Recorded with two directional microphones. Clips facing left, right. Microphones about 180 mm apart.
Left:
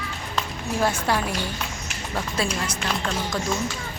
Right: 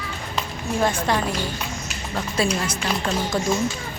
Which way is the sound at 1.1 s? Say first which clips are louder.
Even; 5° left (ahead or behind).